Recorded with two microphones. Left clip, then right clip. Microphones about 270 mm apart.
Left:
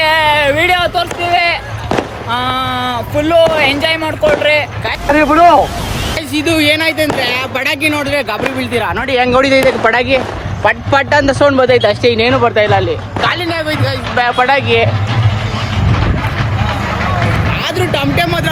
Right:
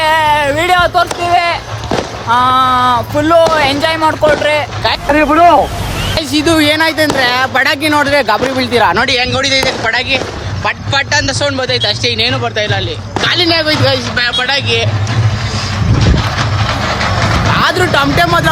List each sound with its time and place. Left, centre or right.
0.0 s a sound: centre
2.3 s speech: centre
6.1 s speech: centre
9.1 s a man's voice: centre
13.4 s speech: right
14.2 s a man's voice: centre
16.6 s vehicle: right
17.6 s speech: centre